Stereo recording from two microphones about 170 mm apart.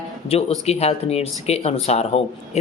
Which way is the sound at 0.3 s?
35° left (ahead or behind).